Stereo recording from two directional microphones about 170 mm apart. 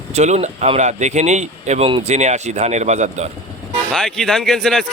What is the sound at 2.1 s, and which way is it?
Speech, 40° right (ahead or behind).